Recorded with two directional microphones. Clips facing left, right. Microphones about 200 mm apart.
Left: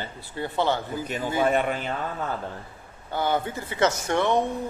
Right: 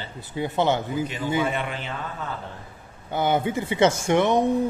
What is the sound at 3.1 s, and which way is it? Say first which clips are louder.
Speech: right 3 dB; 20° right (ahead or behind).